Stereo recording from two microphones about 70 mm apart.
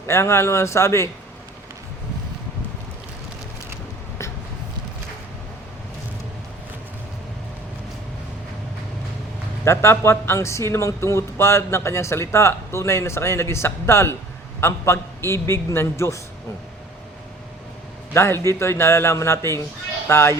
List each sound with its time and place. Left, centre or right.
0.1 s speech: left
9.6 s speech: left
18.1 s speech: left